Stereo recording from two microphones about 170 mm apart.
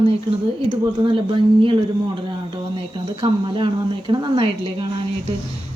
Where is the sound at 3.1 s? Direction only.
30° right (ahead or behind).